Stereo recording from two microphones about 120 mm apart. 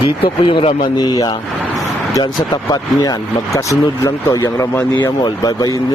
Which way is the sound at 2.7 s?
35° left (ahead or behind).